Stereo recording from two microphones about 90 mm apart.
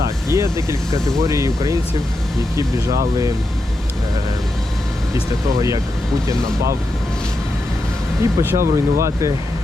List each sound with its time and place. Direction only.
0.3 s speech: 35° right (ahead or behind)
6.2 s speech: 35° right (ahead or behind)
8.2 s speech: 35° right (ahead or behind)